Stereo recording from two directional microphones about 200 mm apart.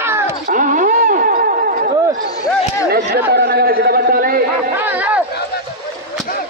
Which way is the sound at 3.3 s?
50° right (ahead or behind).